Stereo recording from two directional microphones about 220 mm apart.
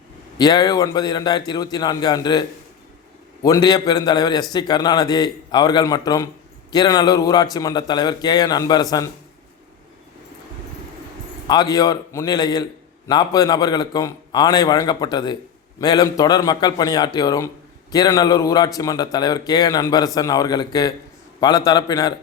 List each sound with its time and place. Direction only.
0.3 s a man's voice: 20° left (ahead or behind)
11.4 s a man's voice: 15° left (ahead or behind)